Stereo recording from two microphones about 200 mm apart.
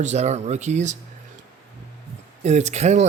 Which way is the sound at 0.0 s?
35° right (ahead or behind).